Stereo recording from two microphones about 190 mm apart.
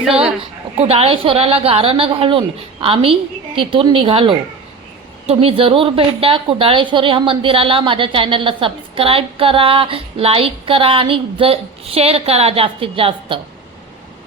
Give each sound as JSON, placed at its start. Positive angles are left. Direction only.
{"t": 0.1, "sound": "a woman's voice", "side_deg": -5}
{"t": 0.8, "sound": "a woman's voice", "side_deg": -30}